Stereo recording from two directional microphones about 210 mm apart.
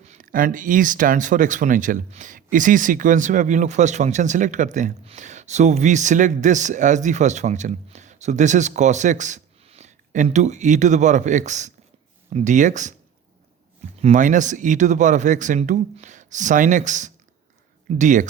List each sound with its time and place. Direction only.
0.0 s speech: 35° right (ahead or behind)
14.0 s speech: 35° right (ahead or behind)